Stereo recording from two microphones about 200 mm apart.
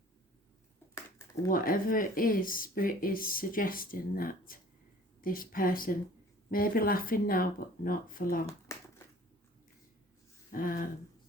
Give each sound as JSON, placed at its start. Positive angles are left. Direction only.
{"t": 1.5, "sound": "speech", "side_deg": 45}
{"t": 10.5, "sound": "speech", "side_deg": 45}